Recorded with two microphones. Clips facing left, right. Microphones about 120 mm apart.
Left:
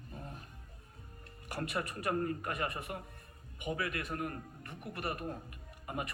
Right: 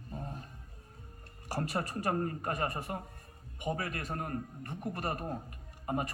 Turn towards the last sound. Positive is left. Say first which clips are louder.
# right 5 dB
turn(degrees=-35)  # may be behind; listen again after turning